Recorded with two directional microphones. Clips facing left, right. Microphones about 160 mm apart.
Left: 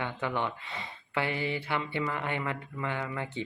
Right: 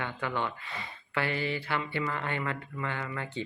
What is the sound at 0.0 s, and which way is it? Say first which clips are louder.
Speech: left 1 dB; 20° left (ahead or behind).